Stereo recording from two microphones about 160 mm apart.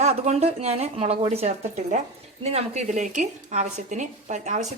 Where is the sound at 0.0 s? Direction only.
45° right (ahead or behind).